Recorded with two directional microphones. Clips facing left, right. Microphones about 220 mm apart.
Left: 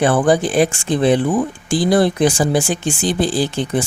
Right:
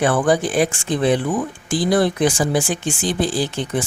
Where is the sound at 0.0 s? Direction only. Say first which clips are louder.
Left 3 dB; 30° left (ahead or behind).